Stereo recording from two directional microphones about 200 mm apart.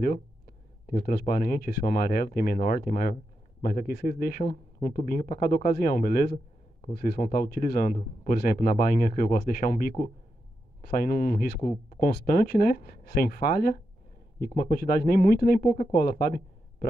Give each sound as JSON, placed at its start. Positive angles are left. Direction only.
{"t": 0.8, "sound": "speech", "side_deg": 45}